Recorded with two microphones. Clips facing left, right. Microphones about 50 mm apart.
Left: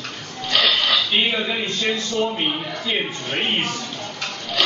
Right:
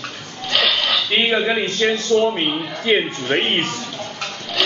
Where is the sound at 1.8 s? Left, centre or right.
Right.